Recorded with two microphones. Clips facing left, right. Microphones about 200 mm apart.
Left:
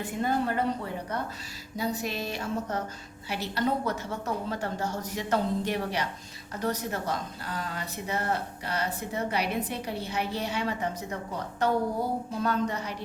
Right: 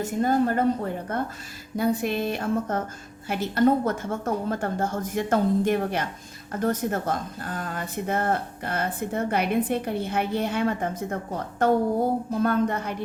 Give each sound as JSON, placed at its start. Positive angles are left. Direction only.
{"t": 0.0, "sound": "speech", "side_deg": -45}
{"t": 1.7, "sound": "a sound", "side_deg": -55}
{"t": 3.2, "sound": "speech", "side_deg": -50}